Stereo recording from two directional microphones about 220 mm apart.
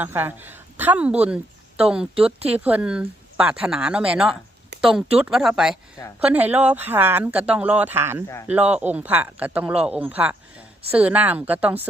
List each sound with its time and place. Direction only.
0.0 s a woman's voice: 10° right (ahead or behind)